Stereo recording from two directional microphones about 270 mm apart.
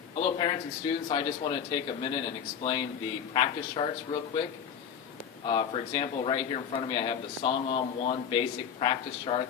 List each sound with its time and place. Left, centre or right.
0.2 s a sound: centre
1.0 s a man's voice: centre
3.3 s a man's voice: centre
5.5 s a man's voice: centre